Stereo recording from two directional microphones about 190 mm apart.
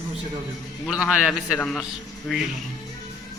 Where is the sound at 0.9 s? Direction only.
5° right (ahead or behind).